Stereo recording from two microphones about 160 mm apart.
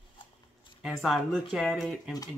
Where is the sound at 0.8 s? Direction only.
Centre (ahead or behind).